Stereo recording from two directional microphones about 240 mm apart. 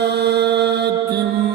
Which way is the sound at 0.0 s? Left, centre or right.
Right.